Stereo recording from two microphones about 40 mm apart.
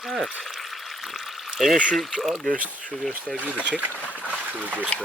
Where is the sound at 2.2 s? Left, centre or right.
Centre.